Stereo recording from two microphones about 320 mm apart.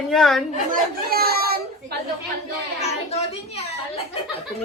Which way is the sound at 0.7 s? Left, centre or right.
Right.